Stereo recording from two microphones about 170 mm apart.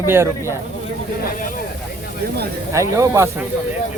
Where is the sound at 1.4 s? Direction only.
55° left (ahead or behind).